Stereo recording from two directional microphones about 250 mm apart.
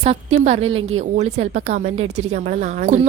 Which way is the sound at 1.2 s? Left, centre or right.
Right.